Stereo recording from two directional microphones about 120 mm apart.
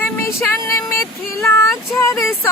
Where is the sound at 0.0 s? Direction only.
20° left (ahead or behind).